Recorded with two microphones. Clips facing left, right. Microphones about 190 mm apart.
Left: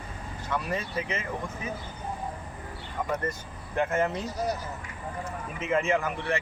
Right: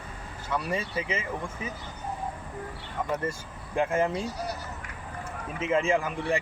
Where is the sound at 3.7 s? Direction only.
10° right (ahead or behind).